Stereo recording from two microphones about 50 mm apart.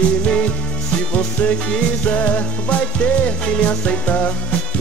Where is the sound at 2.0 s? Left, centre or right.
Left.